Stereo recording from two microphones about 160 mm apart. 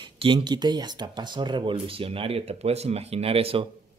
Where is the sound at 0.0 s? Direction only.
30° right (ahead or behind).